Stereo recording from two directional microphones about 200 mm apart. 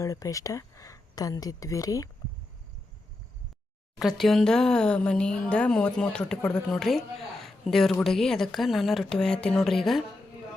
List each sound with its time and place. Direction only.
0.0 s speech: 15° left (ahead or behind)
3.9 s speech: centre (ahead or behind)
7.4 s a sound: centre (ahead or behind)
8.0 s speech: centre (ahead or behind)